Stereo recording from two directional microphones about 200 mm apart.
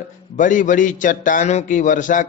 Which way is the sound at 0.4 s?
40° left (ahead or behind).